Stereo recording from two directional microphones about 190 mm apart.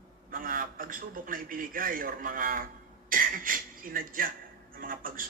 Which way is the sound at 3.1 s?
45° right (ahead or behind).